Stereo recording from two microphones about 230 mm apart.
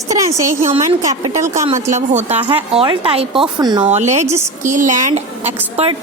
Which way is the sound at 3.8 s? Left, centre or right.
Right.